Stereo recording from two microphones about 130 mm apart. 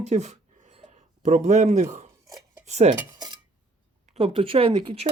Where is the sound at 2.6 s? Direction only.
60° right (ahead or behind).